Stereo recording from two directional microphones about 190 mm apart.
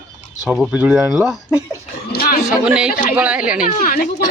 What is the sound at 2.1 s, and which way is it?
Speech, 50° left (ahead or behind).